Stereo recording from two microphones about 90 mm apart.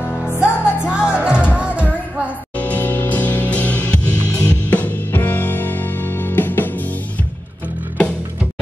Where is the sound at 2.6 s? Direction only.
20° left (ahead or behind).